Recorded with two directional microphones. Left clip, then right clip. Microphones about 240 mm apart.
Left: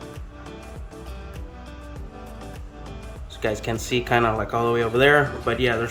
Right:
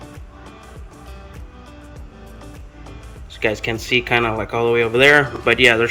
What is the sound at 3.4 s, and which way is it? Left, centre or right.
Speech, centre.